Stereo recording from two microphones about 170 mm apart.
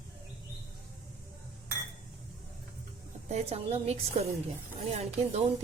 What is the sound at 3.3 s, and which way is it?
A woman's voice, 40° right (ahead or behind).